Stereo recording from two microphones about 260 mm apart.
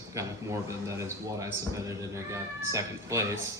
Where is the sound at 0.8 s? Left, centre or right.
Centre.